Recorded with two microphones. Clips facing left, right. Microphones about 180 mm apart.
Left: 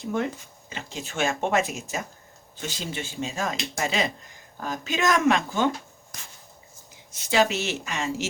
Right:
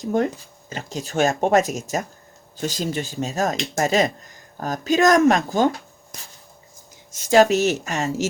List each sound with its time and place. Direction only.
0.0 s speech: 40° right (ahead or behind)
7.1 s speech: 45° right (ahead or behind)